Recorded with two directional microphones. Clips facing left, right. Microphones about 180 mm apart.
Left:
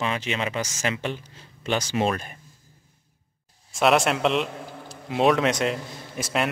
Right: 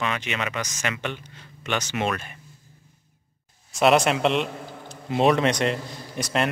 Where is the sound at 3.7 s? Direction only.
Centre (ahead or behind).